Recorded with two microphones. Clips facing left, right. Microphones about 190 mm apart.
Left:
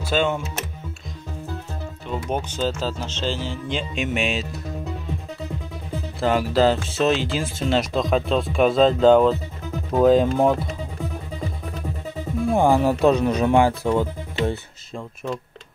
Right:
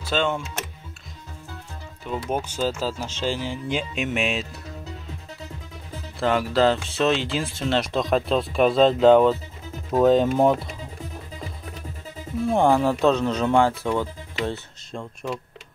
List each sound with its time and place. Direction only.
0.0 s speech: 10° left (ahead or behind)
2.0 s speech: 5° right (ahead or behind)
6.2 s speech: 5° left (ahead or behind)
12.4 s speech: 5° left (ahead or behind)
15.2 s speech: centre (ahead or behind)